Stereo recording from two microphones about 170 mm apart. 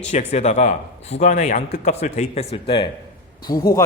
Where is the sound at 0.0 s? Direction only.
40° left (ahead or behind).